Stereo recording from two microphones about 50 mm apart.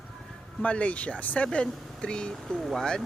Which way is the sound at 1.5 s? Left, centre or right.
Centre.